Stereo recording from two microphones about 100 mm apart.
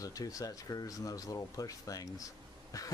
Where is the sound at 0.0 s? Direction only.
35° left (ahead or behind).